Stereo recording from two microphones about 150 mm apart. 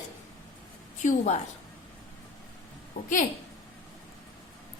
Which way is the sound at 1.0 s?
55° left (ahead or behind).